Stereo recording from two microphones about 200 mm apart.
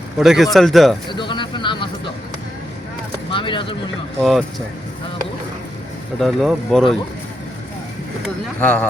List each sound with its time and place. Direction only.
0.2 s speech: centre (ahead or behind)
1.1 s vehicle: 25° left (ahead or behind)
3.3 s speech: 25° left (ahead or behind)
4.2 s speech: centre (ahead or behind)
6.1 s speech: centre (ahead or behind)
8.6 s speech: 5° left (ahead or behind)